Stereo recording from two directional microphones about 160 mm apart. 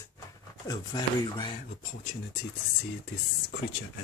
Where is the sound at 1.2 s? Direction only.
25° left (ahead or behind).